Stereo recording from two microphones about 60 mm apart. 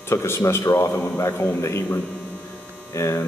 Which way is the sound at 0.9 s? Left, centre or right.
Left.